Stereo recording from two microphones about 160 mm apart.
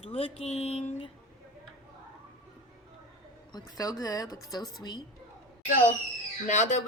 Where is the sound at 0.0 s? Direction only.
35° left (ahead or behind).